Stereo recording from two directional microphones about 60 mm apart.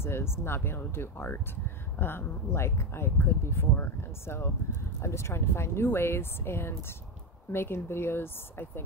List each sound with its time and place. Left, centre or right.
0.0 s speech: left
5.0 s speech: left